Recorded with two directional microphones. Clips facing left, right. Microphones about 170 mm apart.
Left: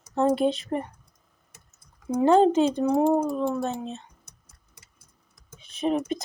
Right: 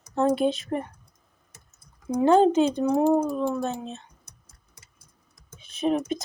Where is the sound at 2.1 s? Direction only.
Centre (ahead or behind).